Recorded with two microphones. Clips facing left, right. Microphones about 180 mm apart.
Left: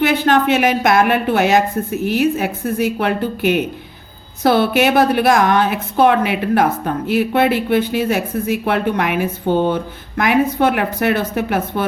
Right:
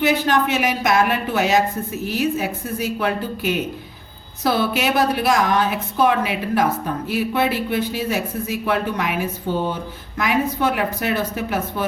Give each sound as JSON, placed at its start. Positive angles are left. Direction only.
{"t": 0.0, "sound": "a woman's voice", "side_deg": 55}